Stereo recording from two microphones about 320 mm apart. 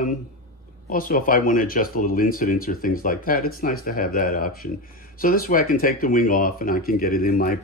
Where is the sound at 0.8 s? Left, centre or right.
Left.